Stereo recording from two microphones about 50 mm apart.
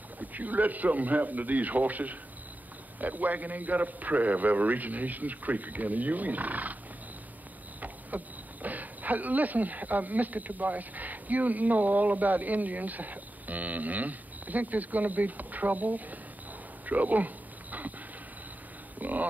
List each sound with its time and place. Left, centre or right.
0.2 s speech: right
8.1 s speech: right
16.8 s dog: right
18.9 s a sound: right